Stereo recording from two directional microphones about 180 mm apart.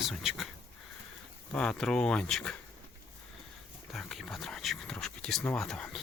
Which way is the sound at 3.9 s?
Centre (ahead or behind).